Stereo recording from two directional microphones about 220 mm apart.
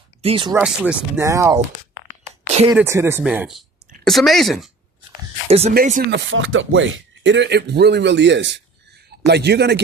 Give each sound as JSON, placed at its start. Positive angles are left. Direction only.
{"t": 0.2, "sound": "speech", "side_deg": -25}
{"t": 0.5, "sound": "speech", "side_deg": -5}
{"t": 2.7, "sound": "speech", "side_deg": -10}
{"t": 5.5, "sound": "speech", "side_deg": -30}
{"t": 6.1, "sound": "a man's voice", "side_deg": -60}